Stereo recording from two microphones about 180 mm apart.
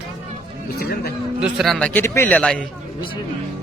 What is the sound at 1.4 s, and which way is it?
A man's voice, 5° right (ahead or behind).